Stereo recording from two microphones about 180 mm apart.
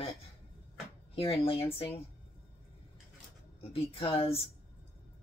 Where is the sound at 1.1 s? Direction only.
30° left (ahead or behind).